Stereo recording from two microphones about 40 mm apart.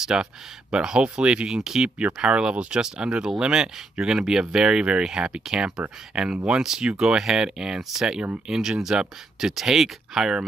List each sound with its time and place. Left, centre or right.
0.0 s speech: centre
1.6 s speech: centre
2.2 s speech: right